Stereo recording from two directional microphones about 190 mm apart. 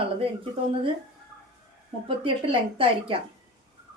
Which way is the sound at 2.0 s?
30° right (ahead or behind).